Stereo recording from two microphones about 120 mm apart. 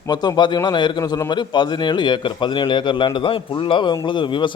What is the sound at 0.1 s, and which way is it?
A man's voice, 35° left (ahead or behind).